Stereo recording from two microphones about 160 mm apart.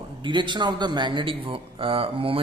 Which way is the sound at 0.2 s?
30° right (ahead or behind).